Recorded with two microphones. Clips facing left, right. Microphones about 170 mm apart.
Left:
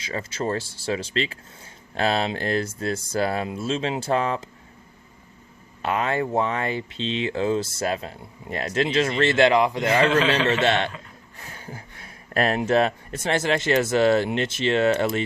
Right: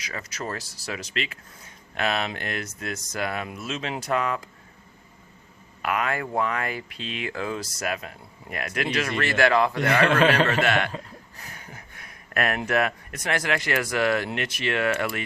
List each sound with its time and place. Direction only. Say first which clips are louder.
0.0 s speech: left 6 dB; 25° left (ahead or behind)
5.8 s speech: left 3 dB; 25° left (ahead or behind)
9.8 s a man's voice: even; 60° right (ahead or behind)
10.5 s speech: left 2 dB; 25° left (ahead or behind)